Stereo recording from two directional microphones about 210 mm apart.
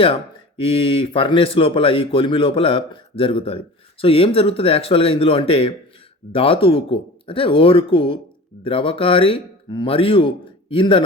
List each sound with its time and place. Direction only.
0.0 s speech: 25° left (ahead or behind)